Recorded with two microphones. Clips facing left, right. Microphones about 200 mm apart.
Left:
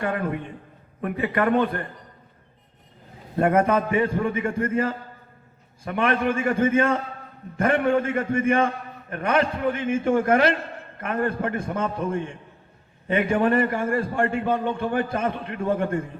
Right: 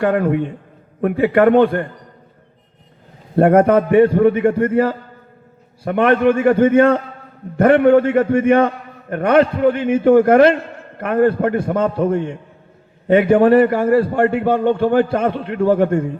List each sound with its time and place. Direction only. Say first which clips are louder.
0.0 s a man's voice: right 10 dB; 60° right (ahead or behind)
3.3 s a man's voice: right 8 dB; 60° right (ahead or behind)